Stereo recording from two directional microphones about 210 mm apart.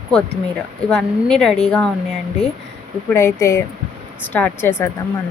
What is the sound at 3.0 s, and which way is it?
A woman's voice, 10° left (ahead or behind).